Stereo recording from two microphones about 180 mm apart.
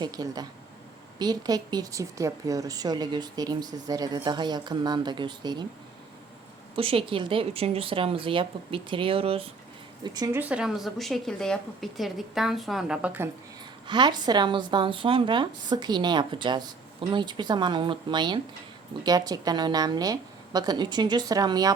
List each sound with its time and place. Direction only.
0.0 s speech: 20° right (ahead or behind)
6.7 s speech: 30° right (ahead or behind)
10.3 s a woman's voice: 5° right (ahead or behind)
13.8 s speech: 25° right (ahead or behind)